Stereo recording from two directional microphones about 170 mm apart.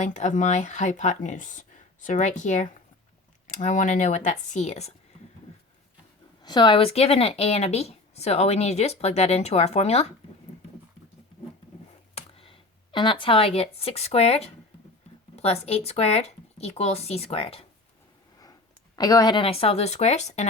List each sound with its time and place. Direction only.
0.0 s speech: 45° left (ahead or behind)
6.4 s speech: 25° left (ahead or behind)
12.1 s speech: 35° left (ahead or behind)
18.9 s speech: 25° left (ahead or behind); by 20.5 s 40° left (ahead or behind)